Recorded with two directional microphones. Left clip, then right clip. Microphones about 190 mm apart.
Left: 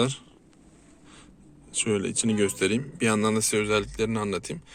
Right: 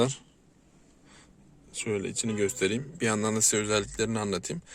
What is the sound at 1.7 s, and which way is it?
Speech, 10° right (ahead or behind).